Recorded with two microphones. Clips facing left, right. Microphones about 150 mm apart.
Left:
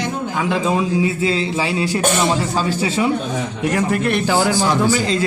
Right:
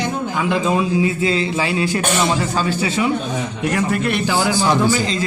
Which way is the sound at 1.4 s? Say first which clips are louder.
Even; 25° left (ahead or behind).